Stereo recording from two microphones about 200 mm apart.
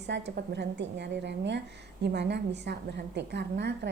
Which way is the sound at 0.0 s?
60° right (ahead or behind).